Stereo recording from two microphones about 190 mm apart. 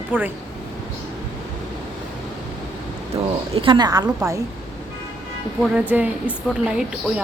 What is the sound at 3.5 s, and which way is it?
Speech, 25° right (ahead or behind).